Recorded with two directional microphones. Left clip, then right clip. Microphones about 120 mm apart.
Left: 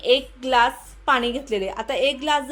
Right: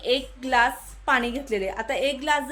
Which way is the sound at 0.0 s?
15° left (ahead or behind).